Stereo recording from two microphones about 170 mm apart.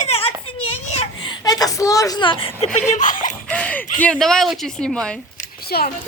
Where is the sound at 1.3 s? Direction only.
20° left (ahead or behind).